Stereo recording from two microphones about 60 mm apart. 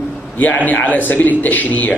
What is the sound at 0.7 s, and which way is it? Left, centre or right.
A man's voice, left.